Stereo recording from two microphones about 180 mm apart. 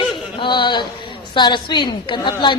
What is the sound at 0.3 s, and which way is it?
A woman's voice, 25° left (ahead or behind).